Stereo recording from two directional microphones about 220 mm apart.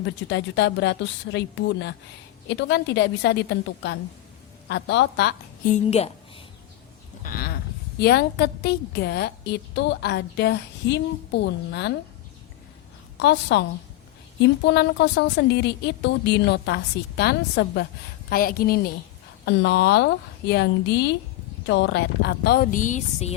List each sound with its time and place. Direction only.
0.0 s a woman's voice: 55° left (ahead or behind)
5.7 s a woman's voice: 30° left (ahead or behind)
7.2 s a woman's voice: 40° left (ahead or behind)
13.1 s a woman's voice: 50° left (ahead or behind); by 23.3 s 35° left (ahead or behind)